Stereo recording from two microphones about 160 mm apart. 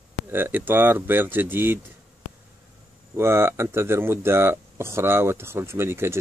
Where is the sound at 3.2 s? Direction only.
15° right (ahead or behind).